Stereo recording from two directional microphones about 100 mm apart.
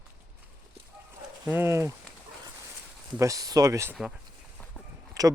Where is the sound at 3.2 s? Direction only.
35° right (ahead or behind).